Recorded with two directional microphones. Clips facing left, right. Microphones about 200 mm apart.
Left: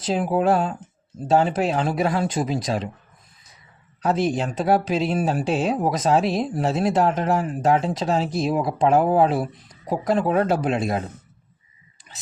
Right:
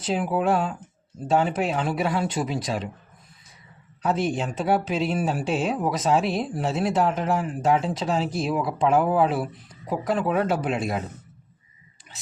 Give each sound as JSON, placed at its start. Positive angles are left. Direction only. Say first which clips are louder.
{"t": 0.0, "sound": "speech", "louder": "left 3 dB", "side_deg": 35}
{"t": 4.0, "sound": "speech", "louder": "left 3 dB", "side_deg": 35}